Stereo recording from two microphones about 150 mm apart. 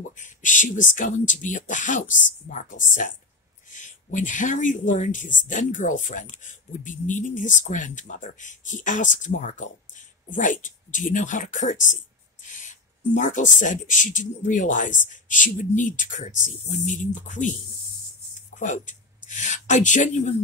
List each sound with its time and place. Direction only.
0.1 s speech: 55° left (ahead or behind)
18.6 s speech: 55° left (ahead or behind)